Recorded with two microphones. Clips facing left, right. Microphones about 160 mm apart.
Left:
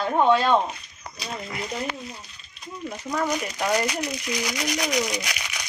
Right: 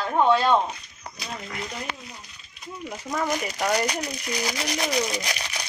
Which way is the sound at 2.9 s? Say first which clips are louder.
Left 1 dB; 5° right (ahead or behind).